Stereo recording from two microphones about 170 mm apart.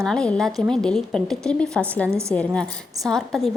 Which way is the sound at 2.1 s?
15° right (ahead or behind).